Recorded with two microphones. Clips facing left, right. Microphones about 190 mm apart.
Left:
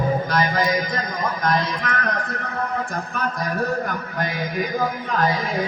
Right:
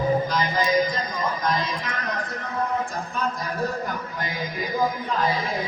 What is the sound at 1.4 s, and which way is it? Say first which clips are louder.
Speech: left 3 dB; 60° left (ahead or behind).